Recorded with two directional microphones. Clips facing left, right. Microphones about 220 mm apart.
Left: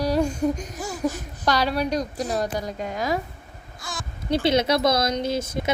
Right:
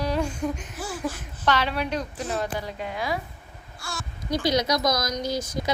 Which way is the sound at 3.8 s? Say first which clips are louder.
Left 3 dB; 20° left (ahead or behind).